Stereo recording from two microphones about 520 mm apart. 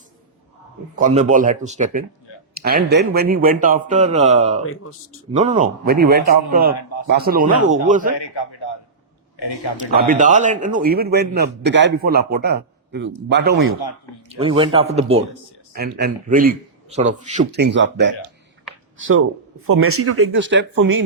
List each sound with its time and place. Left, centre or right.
0.9 s a man's voice: centre
4.6 s speech: left
5.4 s a man's voice: centre
8.2 s a man's voice: left
9.9 s a man's voice: centre